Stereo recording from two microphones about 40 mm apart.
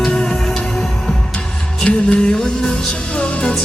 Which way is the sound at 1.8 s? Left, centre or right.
Left.